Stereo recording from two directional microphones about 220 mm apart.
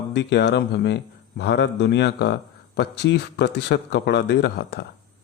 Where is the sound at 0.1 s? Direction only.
50° left (ahead or behind).